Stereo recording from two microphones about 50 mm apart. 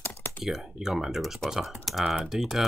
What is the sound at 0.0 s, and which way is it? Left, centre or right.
Typing, left.